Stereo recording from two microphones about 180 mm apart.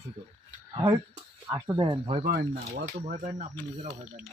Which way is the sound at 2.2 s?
65° right (ahead or behind).